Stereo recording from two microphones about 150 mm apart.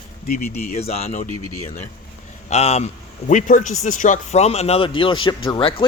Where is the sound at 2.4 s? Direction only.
45° left (ahead or behind).